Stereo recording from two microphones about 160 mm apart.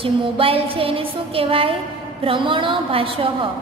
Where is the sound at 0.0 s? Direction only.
35° right (ahead or behind).